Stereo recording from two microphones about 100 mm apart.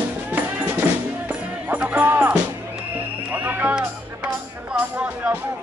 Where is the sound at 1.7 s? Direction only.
15° right (ahead or behind).